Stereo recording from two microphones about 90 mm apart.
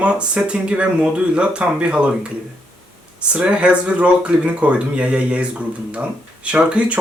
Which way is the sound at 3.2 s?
10° right (ahead or behind).